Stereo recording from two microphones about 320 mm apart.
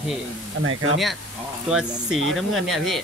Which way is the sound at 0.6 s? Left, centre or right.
Right.